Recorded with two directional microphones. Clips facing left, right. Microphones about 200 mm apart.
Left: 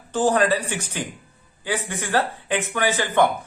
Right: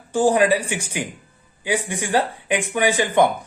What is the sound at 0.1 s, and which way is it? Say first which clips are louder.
A man's voice: right 3 dB; 10° right (ahead or behind).